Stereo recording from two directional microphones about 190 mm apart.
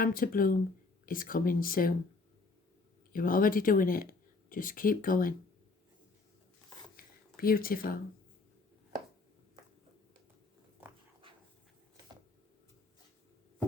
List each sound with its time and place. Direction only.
0.0 s speech: 50° left (ahead or behind)
3.1 s speech: 50° left (ahead or behind)
7.3 s speech: 50° left (ahead or behind)